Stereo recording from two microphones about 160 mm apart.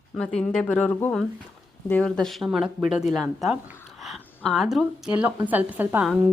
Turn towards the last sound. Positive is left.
turn(degrees=-5)  # may be behind; listen again after turning